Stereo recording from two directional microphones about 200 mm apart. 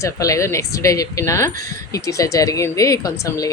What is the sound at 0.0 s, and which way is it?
Speech, 15° left (ahead or behind).